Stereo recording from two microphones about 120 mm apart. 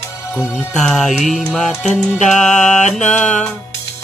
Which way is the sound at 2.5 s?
90° left.